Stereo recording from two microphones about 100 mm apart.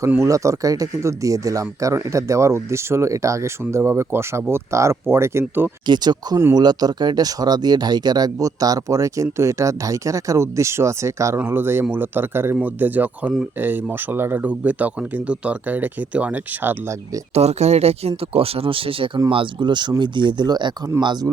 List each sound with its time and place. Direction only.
0.3 s speech: 35° right (ahead or behind)
5.8 s speech: 45° right (ahead or behind); by 17.0 s 25° right (ahead or behind)
17.3 s speech: 90° right
18.2 s speech: 75° right (ahead or behind); by 21.2 s 45° right (ahead or behind)